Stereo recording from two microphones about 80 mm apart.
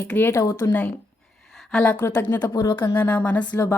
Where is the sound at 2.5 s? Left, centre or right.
Left.